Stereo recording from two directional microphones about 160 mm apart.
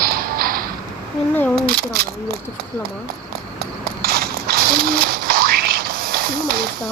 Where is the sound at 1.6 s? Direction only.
70° right (ahead or behind).